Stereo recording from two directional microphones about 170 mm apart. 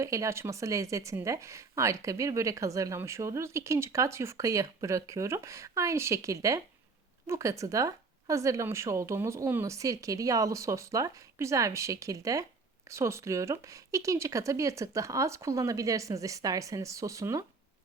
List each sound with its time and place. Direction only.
0.0 s speech: 15° right (ahead or behind)